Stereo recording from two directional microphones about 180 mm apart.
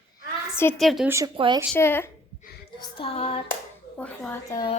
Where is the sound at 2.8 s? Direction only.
30° left (ahead or behind).